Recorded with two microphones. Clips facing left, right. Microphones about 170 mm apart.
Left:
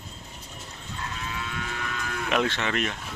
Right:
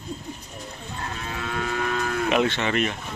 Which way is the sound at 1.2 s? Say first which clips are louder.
Right 7 dB; 50° right (ahead or behind).